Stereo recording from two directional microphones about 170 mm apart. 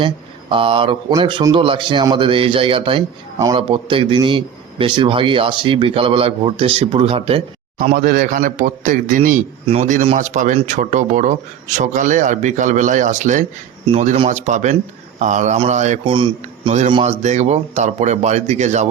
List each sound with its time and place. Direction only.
0.5 s a man's voice: 30° right (ahead or behind)
3.3 s a man's voice: 20° right (ahead or behind)
3.7 s a man's voice: 30° right (ahead or behind)
7.9 s speech: 55° right (ahead or behind)
16.0 s a man's voice: 30° right (ahead or behind)
17.0 s speech: 40° right (ahead or behind)